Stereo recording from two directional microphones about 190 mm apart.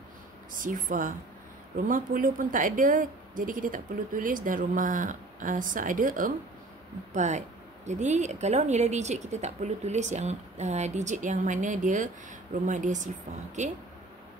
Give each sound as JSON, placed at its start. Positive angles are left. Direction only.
{"t": 0.5, "sound": "a woman's voice", "side_deg": -45}